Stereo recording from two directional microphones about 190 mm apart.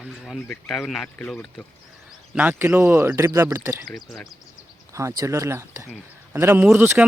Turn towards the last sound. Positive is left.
turn(degrees=-10)  # may be behind; listen again after turning